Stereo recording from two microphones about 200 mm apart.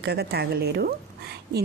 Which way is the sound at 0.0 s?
55° right (ahead or behind).